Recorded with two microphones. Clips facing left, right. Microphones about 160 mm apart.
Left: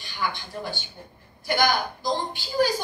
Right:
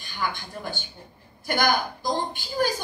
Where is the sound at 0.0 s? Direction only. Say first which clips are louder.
Even; 50° right (ahead or behind).